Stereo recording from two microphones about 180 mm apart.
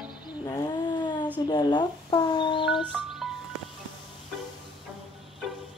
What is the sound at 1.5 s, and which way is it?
Speech, 25° left (ahead or behind).